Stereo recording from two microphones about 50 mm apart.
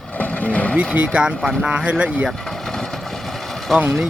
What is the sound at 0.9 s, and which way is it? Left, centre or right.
Speech, right.